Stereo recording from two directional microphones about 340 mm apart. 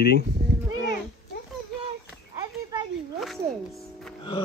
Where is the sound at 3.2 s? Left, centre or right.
Centre.